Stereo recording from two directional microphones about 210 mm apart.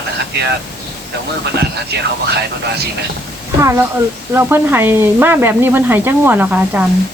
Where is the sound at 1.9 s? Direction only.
50° right (ahead or behind).